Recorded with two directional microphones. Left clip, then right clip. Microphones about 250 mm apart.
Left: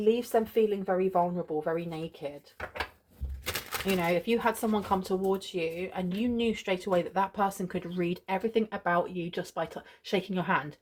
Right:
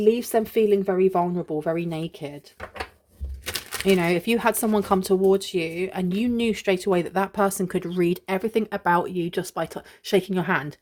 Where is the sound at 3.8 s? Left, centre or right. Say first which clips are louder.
Right 7 dB; right.